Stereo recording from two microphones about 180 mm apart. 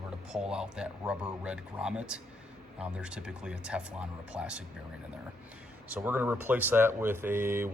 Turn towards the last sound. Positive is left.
turn(degrees=-15)  # may be behind; listen again after turning